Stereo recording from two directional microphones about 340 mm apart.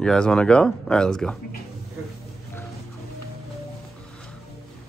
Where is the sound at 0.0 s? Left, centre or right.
Centre.